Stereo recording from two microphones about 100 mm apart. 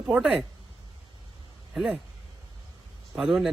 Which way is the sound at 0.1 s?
5° right (ahead or behind).